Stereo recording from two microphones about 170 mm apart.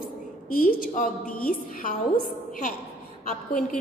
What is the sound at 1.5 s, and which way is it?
Speech, 55° left (ahead or behind).